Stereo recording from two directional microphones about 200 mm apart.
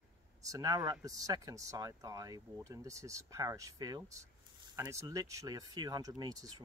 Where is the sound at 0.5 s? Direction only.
15° right (ahead or behind).